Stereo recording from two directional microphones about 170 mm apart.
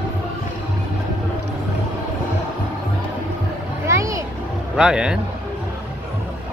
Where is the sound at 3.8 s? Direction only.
15° right (ahead or behind).